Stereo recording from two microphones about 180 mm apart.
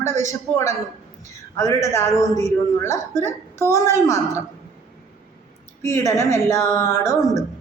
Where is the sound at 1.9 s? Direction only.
15° left (ahead or behind).